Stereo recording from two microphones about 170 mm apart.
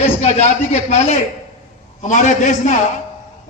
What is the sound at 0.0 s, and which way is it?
A man's voice, 40° left (ahead or behind).